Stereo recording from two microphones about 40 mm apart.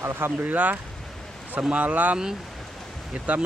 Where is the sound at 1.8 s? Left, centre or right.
Right.